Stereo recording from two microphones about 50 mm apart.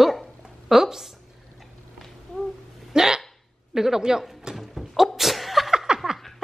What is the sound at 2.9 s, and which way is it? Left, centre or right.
Hiccup, centre.